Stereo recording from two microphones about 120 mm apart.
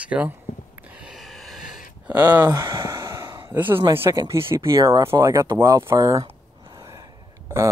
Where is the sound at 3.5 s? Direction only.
15° right (ahead or behind).